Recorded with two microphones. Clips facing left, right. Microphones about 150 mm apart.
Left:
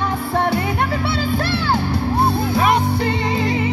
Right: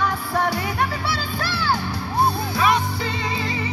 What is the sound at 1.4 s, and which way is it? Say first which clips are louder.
Music: left 4 dB; 25° left (ahead or behind).